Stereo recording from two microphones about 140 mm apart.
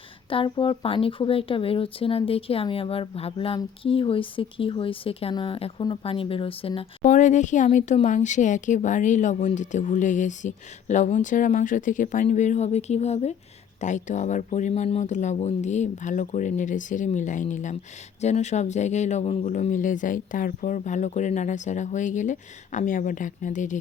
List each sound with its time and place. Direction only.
0.3 s speech: 40° left (ahead or behind)
7.0 s speech: 60° left (ahead or behind)
14.7 s speech: 45° left (ahead or behind); by 23.7 s 65° left (ahead or behind)